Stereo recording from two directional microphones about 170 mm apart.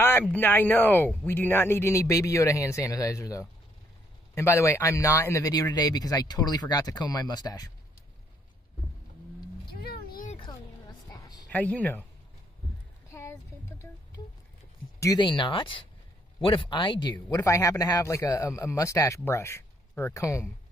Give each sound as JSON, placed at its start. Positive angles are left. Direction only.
{"t": 0.0, "sound": "speech", "side_deg": 10}
{"t": 9.7, "sound": "vehicle", "side_deg": 65}
{"t": 10.5, "sound": "a sound", "side_deg": 25}
{"t": 11.5, "sound": "speech", "side_deg": 10}
{"t": 13.1, "sound": "music", "side_deg": 15}
{"t": 15.0, "sound": "speech", "side_deg": 20}